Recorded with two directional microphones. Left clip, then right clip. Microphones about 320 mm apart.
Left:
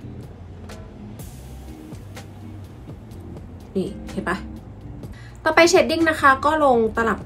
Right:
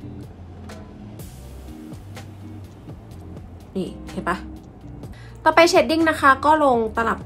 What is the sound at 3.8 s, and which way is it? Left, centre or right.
A woman's voice, centre.